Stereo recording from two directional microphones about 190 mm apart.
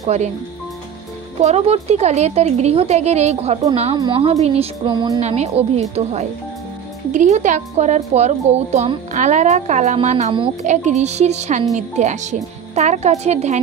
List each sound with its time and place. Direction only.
0.0 s speech: 35° right (ahead or behind)
1.4 s a woman's voice: 35° right (ahead or behind)
5.2 s a woman's voice: 35° right (ahead or behind)